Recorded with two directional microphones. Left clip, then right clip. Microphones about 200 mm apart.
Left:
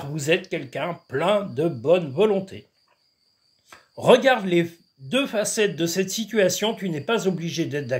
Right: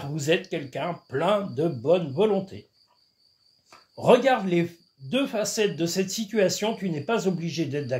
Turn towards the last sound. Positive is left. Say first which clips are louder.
# left 2 dB
turn(degrees=25)  # may be behind; listen again after turning